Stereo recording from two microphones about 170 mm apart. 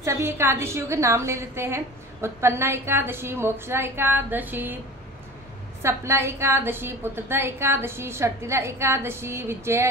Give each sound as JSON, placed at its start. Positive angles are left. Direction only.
{"t": 0.0, "sound": "a woman's voice", "side_deg": -15}
{"t": 5.8, "sound": "a woman's voice", "side_deg": -15}